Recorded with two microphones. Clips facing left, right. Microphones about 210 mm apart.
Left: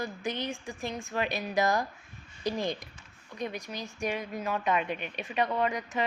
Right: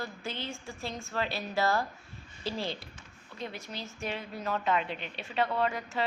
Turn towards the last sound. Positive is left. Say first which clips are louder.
# left 1 dB
turn(degrees=15)  # may be behind; listen again after turning